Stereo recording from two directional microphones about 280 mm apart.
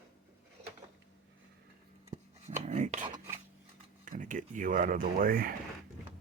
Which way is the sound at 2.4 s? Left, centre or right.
Right.